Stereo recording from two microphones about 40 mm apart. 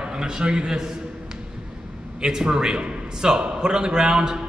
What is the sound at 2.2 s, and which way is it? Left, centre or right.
A man's voice, centre.